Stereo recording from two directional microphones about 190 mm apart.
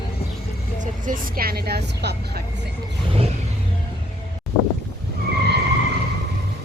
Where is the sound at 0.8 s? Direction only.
45° right (ahead or behind).